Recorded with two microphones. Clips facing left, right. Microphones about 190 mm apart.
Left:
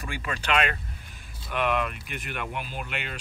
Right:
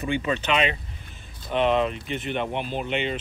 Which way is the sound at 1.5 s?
30° right (ahead or behind).